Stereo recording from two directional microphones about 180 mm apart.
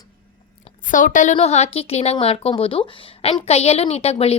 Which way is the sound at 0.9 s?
45° left (ahead or behind).